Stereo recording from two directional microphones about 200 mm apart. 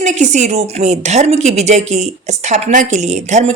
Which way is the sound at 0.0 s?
35° right (ahead or behind).